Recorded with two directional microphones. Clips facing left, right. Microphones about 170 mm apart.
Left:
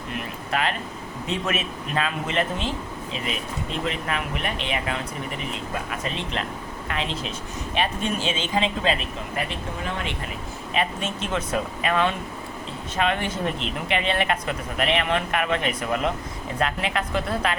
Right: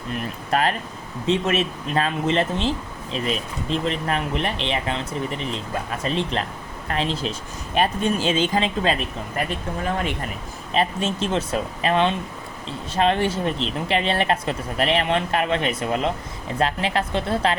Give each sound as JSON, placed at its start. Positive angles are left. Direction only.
{"t": 0.5, "sound": "speech", "side_deg": -40}
{"t": 3.8, "sound": "speech", "side_deg": -35}
{"t": 10.8, "sound": "speech", "side_deg": -30}